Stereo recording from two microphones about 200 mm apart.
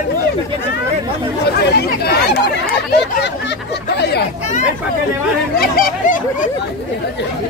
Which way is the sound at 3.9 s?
55° left (ahead or behind).